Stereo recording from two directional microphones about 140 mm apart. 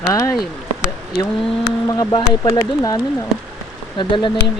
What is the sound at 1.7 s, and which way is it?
Speech, 30° left (ahead or behind).